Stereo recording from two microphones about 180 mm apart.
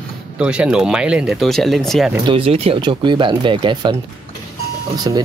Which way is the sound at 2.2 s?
30° right (ahead or behind).